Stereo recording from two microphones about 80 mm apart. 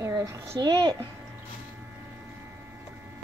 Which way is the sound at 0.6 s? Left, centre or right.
Right.